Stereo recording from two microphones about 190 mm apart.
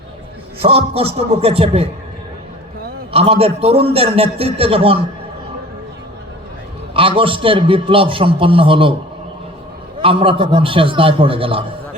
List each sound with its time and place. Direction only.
0.6 s a man's voice: 30° right (ahead or behind)
3.1 s a man's voice: 30° right (ahead or behind)
6.9 s a man's voice: 30° right (ahead or behind)
10.0 s a man's voice: 25° right (ahead or behind)